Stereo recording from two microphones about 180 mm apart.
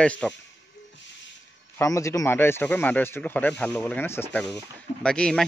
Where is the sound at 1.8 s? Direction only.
20° left (ahead or behind).